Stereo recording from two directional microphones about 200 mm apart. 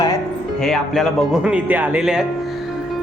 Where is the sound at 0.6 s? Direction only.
Centre (ahead or behind).